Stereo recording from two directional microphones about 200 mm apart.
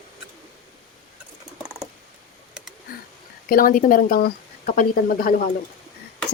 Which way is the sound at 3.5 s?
45° left (ahead or behind).